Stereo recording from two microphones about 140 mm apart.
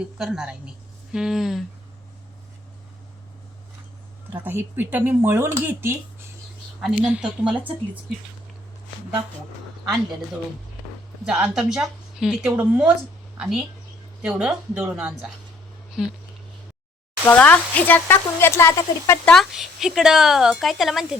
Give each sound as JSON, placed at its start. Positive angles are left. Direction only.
{"t": 0.2, "sound": "a woman's voice", "side_deg": -5}
{"t": 4.4, "sound": "speech", "side_deg": -15}
{"t": 6.7, "sound": "speech", "side_deg": -5}
{"t": 11.3, "sound": "a woman's voice", "side_deg": -5}
{"t": 17.2, "sound": "speech", "side_deg": 10}
{"t": 19.2, "sound": "a woman's voice", "side_deg": 5}